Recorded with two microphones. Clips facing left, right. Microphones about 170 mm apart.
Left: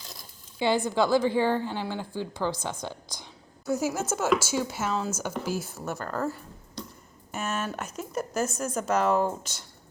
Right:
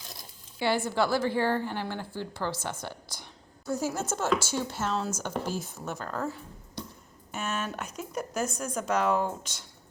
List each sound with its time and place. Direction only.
0.6 s a woman's voice: 20° left (ahead or behind)